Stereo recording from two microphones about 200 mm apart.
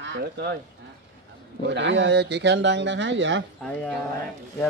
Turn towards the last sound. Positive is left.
turn(degrees=-65)  # may be behind; listen again after turning